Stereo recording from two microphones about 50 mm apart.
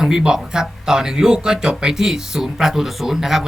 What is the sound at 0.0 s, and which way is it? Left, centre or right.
A man's voice, centre.